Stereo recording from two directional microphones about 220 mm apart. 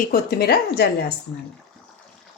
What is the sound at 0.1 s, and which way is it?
Speech, 45° left (ahead or behind).